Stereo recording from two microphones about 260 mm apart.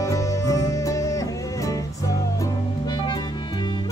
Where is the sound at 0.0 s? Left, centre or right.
Centre.